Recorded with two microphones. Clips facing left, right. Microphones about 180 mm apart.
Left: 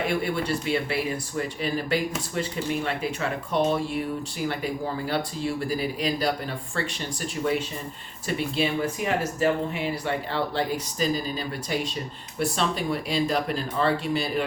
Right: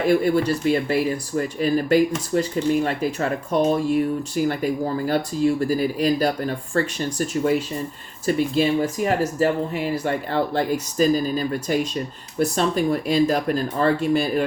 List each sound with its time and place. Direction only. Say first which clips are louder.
0.0 s speech: right 8 dB; 40° right (ahead or behind)